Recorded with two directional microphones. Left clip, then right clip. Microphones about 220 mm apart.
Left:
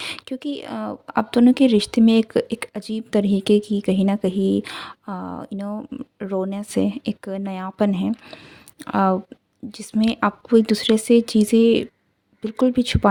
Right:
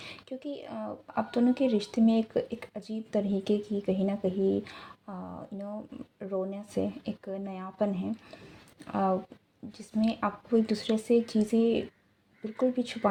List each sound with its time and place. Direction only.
0.0 s speech: 40° left (ahead or behind)